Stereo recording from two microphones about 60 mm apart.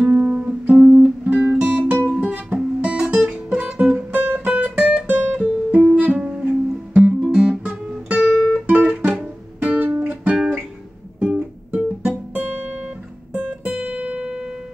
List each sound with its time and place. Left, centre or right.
0.0 s music: right
0.7 s music: centre
1.2 s guitar: centre
2.0 s music: right
7.1 s guitar: centre
8.6 s music: right
11.1 s guitar: centre